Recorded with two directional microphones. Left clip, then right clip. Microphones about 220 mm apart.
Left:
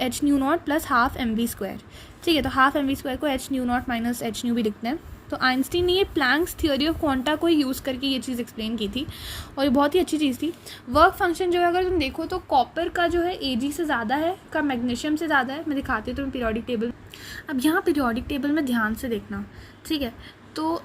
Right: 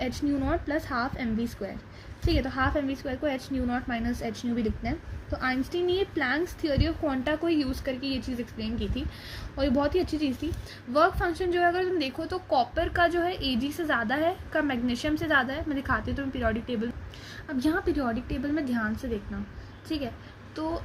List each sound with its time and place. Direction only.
0.0 s a woman's voice: 40° left (ahead or behind); by 16.9 s 20° left (ahead or behind)
17.3 s a woman's voice: 30° left (ahead or behind)
20.6 s a woman's voice: 30° left (ahead or behind)